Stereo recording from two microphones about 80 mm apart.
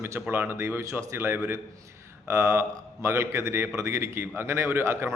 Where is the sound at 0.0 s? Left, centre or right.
Right.